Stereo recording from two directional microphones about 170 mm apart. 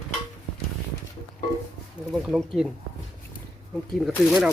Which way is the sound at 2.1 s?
Centre (ahead or behind).